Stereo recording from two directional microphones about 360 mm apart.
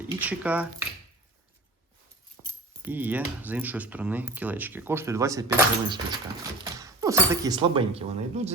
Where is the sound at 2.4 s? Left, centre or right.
Right.